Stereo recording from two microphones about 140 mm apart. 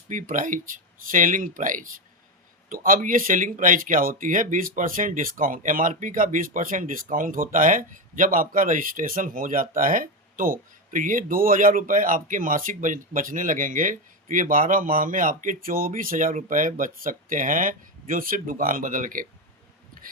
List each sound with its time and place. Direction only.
0.1 s speech: 65° right (ahead or behind)
2.6 s speech: 85° right